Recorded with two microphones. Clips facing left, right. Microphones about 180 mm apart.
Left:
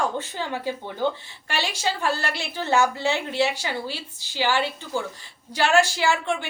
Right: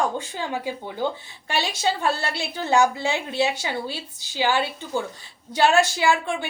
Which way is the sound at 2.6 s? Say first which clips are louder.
Right 1 dB; 15° right (ahead or behind).